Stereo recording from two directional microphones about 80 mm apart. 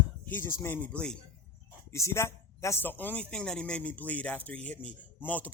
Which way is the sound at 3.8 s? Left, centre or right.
Left.